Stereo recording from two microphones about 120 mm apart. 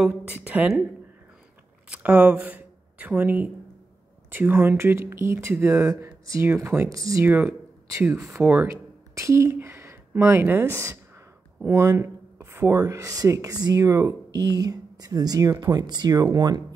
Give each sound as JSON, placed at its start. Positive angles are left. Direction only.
{"t": 0.0, "sound": "speech", "side_deg": -15}
{"t": 1.9, "sound": "speech", "side_deg": -10}
{"t": 7.2, "sound": "speech", "side_deg": -15}
{"t": 8.6, "sound": "speech", "side_deg": -25}